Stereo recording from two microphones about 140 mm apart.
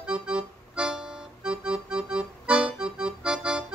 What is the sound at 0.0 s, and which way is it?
Music, 5° right (ahead or behind).